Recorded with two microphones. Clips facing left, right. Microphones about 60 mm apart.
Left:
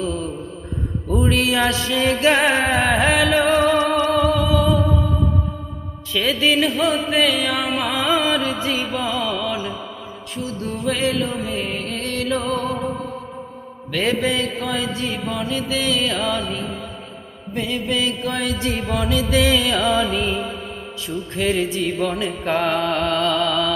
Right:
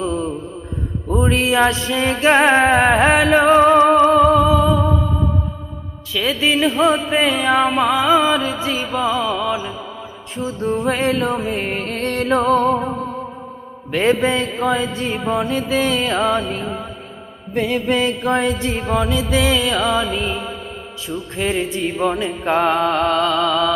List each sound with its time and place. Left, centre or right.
1.0 s music: right
6.4 s music: centre
10.3 s music: right
13.9 s music: right; by 20.3 s centre
21.3 s music: centre